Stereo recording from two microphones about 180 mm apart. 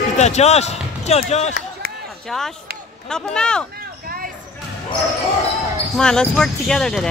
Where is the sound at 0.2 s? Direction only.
35° left (ahead or behind).